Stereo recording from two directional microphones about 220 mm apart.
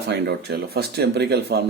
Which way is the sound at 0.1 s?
45° right (ahead or behind).